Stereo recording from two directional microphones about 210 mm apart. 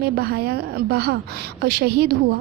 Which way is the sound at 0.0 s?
50° right (ahead or behind).